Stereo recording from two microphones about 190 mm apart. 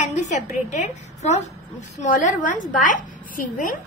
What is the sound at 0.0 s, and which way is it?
A woman's voice, 40° left (ahead or behind).